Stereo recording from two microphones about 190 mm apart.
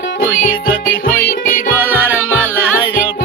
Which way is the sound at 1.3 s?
50° left (ahead or behind).